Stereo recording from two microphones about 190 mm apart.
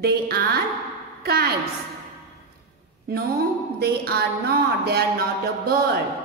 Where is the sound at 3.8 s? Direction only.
55° right (ahead or behind).